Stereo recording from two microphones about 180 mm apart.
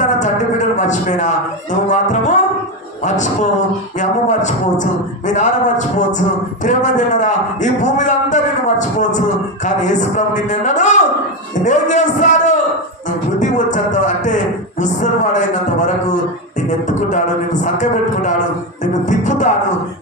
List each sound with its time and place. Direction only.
0.0 s a man's voice: 45° left (ahead or behind)
4.0 s speech: 45° left (ahead or behind)
19.0 s music: 45° left (ahead or behind)